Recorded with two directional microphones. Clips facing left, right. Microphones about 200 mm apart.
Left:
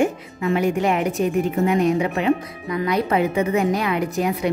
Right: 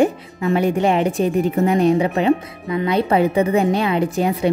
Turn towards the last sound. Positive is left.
turn(degrees=-30)  # may be behind; listen again after turning